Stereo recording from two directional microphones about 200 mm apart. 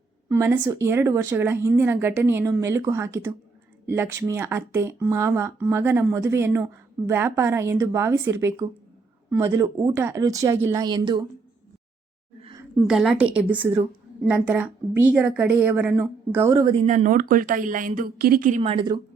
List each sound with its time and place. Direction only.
0.3 s speech: 10° right (ahead or behind)
12.4 s a sound: 25° right (ahead or behind)
12.7 s a woman's voice: 5° right (ahead or behind)
16.7 s speech: 35° right (ahead or behind)